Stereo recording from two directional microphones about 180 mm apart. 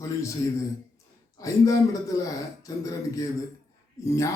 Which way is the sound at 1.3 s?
20° left (ahead or behind).